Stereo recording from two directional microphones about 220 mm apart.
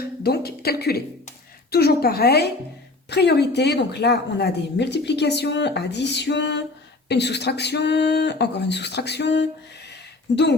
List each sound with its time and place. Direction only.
0.0 s speech: 45° left (ahead or behind)